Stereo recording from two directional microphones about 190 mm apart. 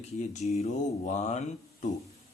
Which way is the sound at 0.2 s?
35° left (ahead or behind).